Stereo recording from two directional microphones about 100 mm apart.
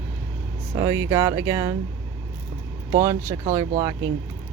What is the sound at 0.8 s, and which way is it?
Speech, 30° right (ahead or behind).